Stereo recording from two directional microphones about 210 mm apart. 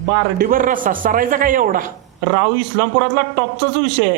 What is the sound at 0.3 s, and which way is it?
A man's voice, 40° right (ahead or behind).